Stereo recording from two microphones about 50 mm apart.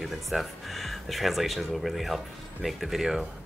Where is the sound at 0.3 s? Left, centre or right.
Centre.